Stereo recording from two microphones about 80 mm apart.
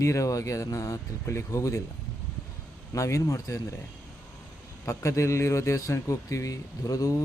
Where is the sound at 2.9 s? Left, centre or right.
Left.